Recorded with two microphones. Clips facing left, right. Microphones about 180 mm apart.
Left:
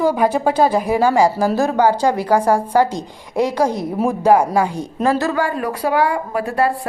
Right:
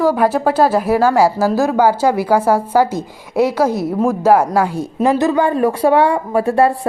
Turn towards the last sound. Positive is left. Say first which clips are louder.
# right 5 dB
turn(degrees=-25)  # may be behind; listen again after turning